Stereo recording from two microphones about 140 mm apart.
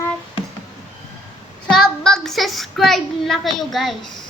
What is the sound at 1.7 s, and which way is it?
A child's voice, 5° left (ahead or behind).